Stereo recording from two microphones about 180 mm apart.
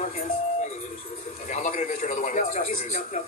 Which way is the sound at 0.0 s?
40° left (ahead or behind).